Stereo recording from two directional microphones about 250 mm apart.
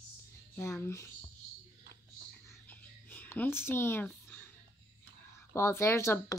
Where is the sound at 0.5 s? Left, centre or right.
Centre.